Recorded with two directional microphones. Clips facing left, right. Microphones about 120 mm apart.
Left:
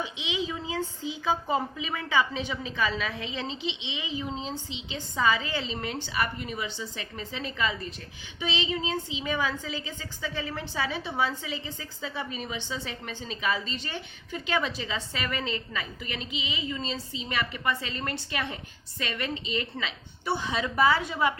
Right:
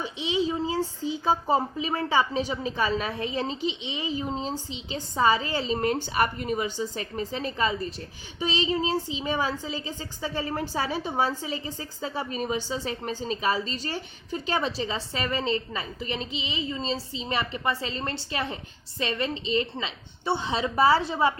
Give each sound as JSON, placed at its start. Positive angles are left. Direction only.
{"t": 0.0, "sound": "a woman's voice", "side_deg": -40}